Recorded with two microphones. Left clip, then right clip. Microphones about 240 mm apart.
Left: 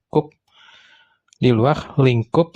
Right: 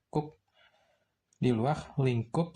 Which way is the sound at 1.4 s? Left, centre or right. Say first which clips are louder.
Left 13 dB; left.